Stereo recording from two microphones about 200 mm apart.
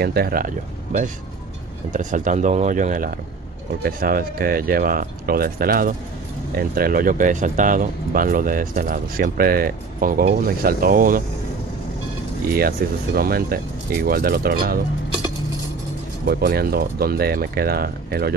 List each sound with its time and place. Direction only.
0.0 s speech: 50° right (ahead or behind)
1.9 s speech: 40° right (ahead or behind)
12.4 s speech: 50° right (ahead or behind)
16.3 s speech: 50° right (ahead or behind)